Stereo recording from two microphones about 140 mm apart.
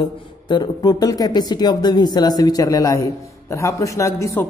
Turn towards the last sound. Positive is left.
turn(degrees=20)  # may be behind; listen again after turning